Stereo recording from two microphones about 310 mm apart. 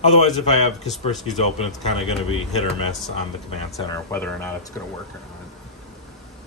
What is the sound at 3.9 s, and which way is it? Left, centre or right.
Speech, centre.